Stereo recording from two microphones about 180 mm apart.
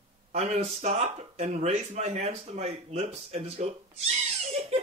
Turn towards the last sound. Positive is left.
turn(degrees=-35)  # may be behind; listen again after turning